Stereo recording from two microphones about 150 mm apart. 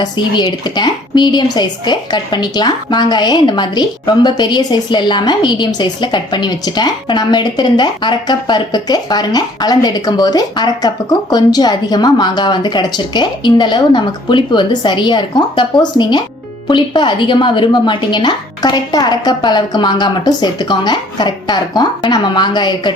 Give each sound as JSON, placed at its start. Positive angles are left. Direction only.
{"t": 0.0, "sound": "a woman's voice", "side_deg": 30}